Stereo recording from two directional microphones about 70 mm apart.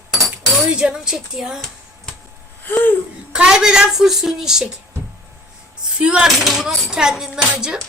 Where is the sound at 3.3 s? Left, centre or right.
Centre.